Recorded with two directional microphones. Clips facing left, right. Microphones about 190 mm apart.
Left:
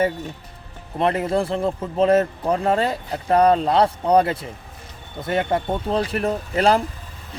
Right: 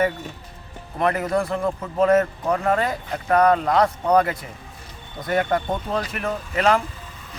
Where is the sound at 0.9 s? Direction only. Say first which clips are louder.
Left 1 dB; 25° left (ahead or behind).